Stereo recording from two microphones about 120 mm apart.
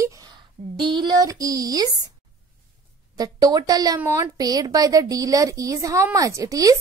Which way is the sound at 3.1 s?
30° right (ahead or behind).